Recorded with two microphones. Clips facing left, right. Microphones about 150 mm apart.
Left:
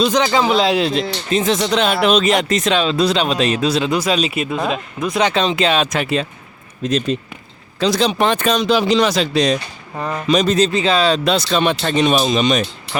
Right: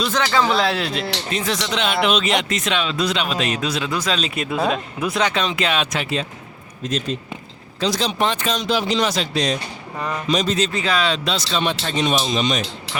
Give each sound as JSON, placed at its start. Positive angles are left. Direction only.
{"t": 0.0, "sound": "speech", "side_deg": 20}
{"t": 1.5, "sound": "speech", "side_deg": 40}
{"t": 3.9, "sound": "speech", "side_deg": 10}
{"t": 4.5, "sound": "speech", "side_deg": -5}
{"t": 5.1, "sound": "speech", "side_deg": 25}
{"t": 5.9, "sound": "speech", "side_deg": 60}
{"t": 6.8, "sound": "speech", "side_deg": 70}
{"t": 10.7, "sound": "speech", "side_deg": 25}
{"t": 11.1, "sound": "speech", "side_deg": 55}
{"t": 12.9, "sound": "a sound", "side_deg": -90}